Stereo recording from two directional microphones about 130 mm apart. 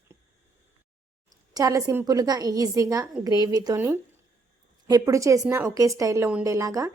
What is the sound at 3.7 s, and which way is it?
A woman's voice, 20° right (ahead or behind).